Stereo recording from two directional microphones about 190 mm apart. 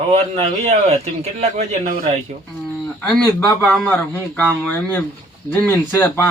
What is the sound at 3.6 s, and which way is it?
Speech, 10° left (ahead or behind).